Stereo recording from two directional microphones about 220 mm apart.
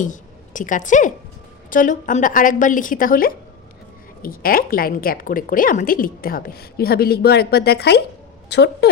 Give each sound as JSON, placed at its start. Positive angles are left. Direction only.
{"t": 0.0, "sound": "a woman's voice", "side_deg": 35}